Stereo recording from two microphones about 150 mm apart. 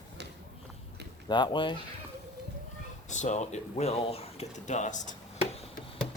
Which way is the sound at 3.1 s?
50° left (ahead or behind).